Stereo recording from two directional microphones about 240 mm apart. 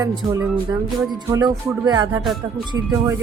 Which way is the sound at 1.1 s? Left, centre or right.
Centre.